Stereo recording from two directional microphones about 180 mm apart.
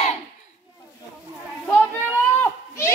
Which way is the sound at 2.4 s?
15° left (ahead or behind).